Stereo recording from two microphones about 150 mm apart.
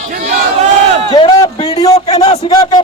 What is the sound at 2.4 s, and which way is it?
Speech, 25° left (ahead or behind).